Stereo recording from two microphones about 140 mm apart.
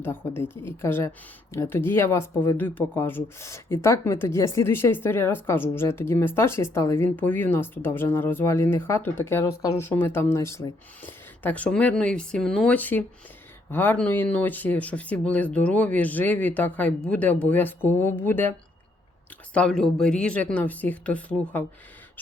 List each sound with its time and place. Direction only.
0.0 s speech: 15° left (ahead or behind)
19.5 s speech: 5° left (ahead or behind)